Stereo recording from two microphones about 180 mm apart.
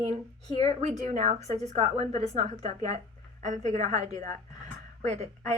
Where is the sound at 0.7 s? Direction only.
40° right (ahead or behind).